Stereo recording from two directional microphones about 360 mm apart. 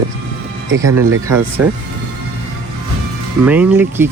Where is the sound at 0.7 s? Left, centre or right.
Right.